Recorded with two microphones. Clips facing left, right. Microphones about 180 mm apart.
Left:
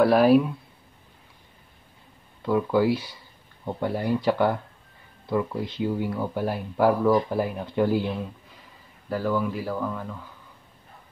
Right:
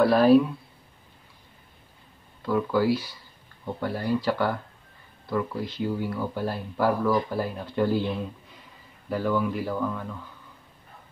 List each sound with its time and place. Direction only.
0.0 s speech: 10° left (ahead or behind)
2.4 s speech: 20° left (ahead or behind)
9.1 s speech: 5° left (ahead or behind)